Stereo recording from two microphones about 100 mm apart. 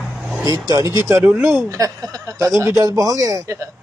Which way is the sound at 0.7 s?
35° right (ahead or behind).